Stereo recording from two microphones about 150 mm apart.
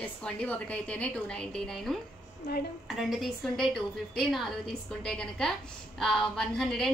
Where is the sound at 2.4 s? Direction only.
90° left.